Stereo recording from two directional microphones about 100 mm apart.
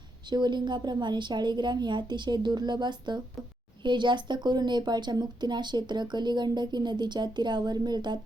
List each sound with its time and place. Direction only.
0.3 s speech: 50° right (ahead or behind)